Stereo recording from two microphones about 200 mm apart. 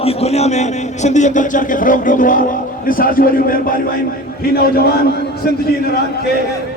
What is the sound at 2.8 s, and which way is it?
Speech, 45° left (ahead or behind).